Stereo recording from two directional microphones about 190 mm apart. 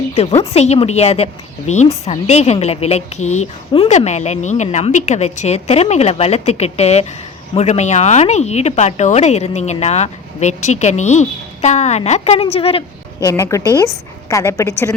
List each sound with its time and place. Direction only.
0.1 s a woman's voice: 35° left (ahead or behind)
13.1 s a woman's voice: 15° left (ahead or behind)